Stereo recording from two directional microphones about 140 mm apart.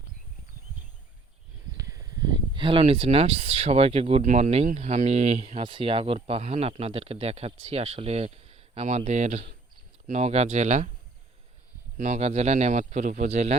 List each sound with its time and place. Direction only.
1.7 s speech: 25° right (ahead or behind); by 10.9 s 55° right (ahead or behind)
11.9 s speech: 55° right (ahead or behind)